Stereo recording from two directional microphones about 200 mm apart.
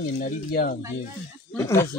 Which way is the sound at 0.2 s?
45° left (ahead or behind).